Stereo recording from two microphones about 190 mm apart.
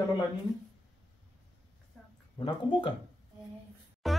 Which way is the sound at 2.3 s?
25° left (ahead or behind).